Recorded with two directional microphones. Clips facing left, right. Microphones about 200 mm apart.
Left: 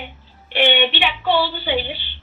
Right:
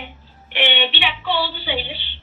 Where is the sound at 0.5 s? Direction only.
45° left (ahead or behind).